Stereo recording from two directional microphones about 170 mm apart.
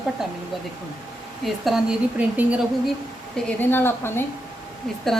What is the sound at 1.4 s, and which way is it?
Speech, centre (ahead or behind).